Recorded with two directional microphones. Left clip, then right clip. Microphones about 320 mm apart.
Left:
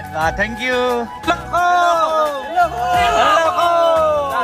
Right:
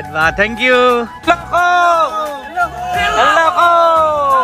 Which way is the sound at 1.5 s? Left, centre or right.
Centre.